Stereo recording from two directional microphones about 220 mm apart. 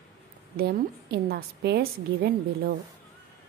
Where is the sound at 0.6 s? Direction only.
45° right (ahead or behind).